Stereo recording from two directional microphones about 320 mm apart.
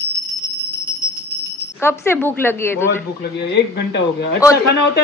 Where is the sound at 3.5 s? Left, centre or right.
Left.